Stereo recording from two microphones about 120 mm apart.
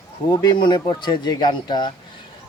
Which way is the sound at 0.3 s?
40° left (ahead or behind).